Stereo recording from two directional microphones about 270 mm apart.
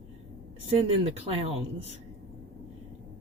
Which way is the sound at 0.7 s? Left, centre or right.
Right.